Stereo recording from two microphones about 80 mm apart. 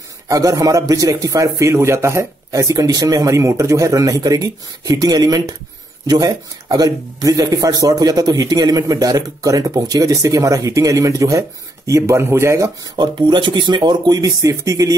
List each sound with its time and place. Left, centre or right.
0.3 s speech: right
2.6 s speech: right
12.8 s speech: right